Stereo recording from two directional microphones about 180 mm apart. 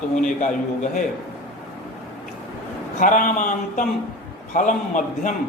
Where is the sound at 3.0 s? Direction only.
45° left (ahead or behind).